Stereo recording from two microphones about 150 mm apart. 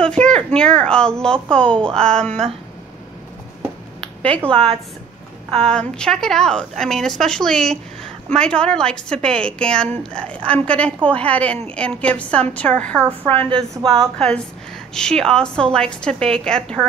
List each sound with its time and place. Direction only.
0.0 s a woman's voice: 5° left (ahead or behind)
4.0 s a sound: 10° left (ahead or behind)
4.5 s speech: 40° right (ahead or behind)
5.6 s a woman's voice: 5° left (ahead or behind)
13.3 s speech: 35° right (ahead or behind)
13.6 s a woman's voice: 5° left (ahead or behind)